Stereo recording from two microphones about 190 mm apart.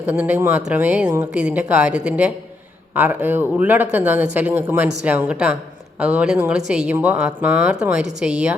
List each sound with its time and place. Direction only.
0.0 s speech: 5° right (ahead or behind)
1.0 s a woman's voice: 20° right (ahead or behind)
1.3 s a woman's voice: 5° right (ahead or behind)